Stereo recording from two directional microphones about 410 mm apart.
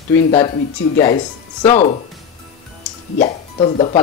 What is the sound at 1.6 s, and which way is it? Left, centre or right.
Speech, centre.